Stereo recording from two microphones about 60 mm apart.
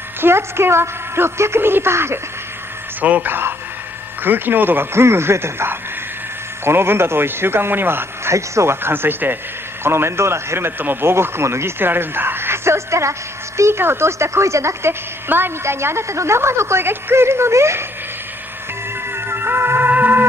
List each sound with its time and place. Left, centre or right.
0.2 s a woman's voice: right
3.0 s speech: right
8.8 s a woman's voice: right
10.8 s a woman's voice: right
19.1 s music: right